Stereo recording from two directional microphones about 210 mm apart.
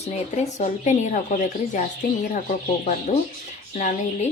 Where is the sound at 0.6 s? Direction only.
35° left (ahead or behind).